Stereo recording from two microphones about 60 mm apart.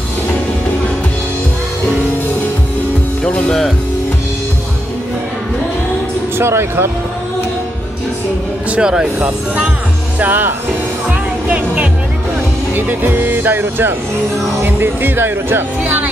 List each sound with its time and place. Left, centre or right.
3.3 s speech: centre
6.3 s speech: right
8.6 s speech: centre
10.1 s speech: right
11.1 s music: right
12.7 s speech: right
15.8 s speech: right